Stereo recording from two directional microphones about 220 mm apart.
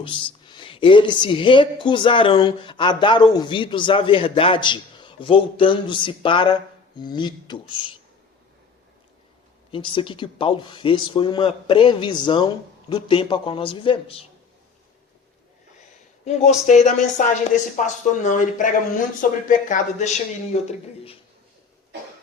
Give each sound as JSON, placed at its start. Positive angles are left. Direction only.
{"t": 0.0, "sound": "a woman's voice", "side_deg": 20}
{"t": 9.7, "sound": "a woman's voice", "side_deg": 20}
{"t": 16.2, "sound": "a woman's voice", "side_deg": 30}